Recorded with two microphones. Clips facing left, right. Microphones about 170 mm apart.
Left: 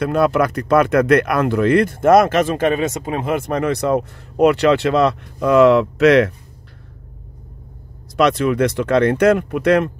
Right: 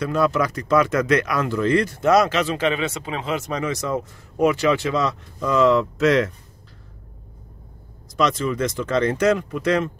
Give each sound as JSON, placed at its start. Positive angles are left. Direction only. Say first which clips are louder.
{"t": 0.0, "sound": "speech", "louder": "left 4 dB", "side_deg": 60}
{"t": 8.2, "sound": "speech", "louder": "left 6 dB", "side_deg": 65}